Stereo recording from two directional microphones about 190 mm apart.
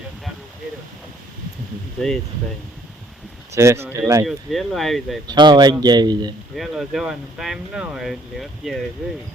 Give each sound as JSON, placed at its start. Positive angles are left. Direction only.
{"t": 3.5, "sound": "speech", "side_deg": -15}
{"t": 4.3, "sound": "speech", "side_deg": 0}
{"t": 5.3, "sound": "speech", "side_deg": -20}
{"t": 6.6, "sound": "speech", "side_deg": 0}